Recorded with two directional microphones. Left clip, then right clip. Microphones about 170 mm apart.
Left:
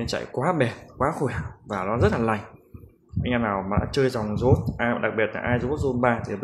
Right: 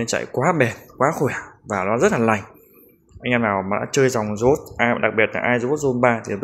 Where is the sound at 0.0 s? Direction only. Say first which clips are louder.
Right 6 dB; 20° right (ahead or behind).